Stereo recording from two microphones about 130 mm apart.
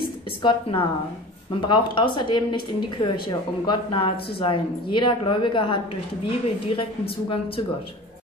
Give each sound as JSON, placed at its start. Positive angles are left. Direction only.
{"t": 0.4, "sound": "a woman's voice", "side_deg": 40}